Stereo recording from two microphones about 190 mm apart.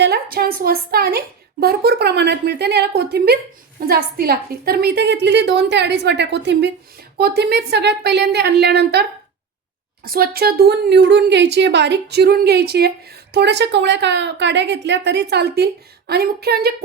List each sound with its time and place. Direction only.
0.0 s a woman's voice: 55° right (ahead or behind)